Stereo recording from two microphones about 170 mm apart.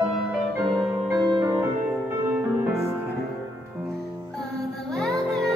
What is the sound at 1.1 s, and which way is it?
Music, 25° right (ahead or behind).